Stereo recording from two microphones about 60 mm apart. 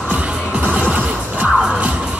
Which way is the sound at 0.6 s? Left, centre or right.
Right.